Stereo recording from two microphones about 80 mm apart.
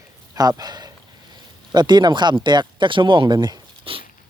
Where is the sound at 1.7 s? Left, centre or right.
Right.